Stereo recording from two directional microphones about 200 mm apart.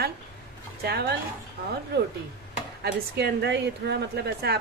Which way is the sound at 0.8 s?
55° right (ahead or behind).